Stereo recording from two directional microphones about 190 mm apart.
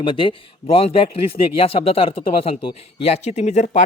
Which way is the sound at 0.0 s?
25° left (ahead or behind).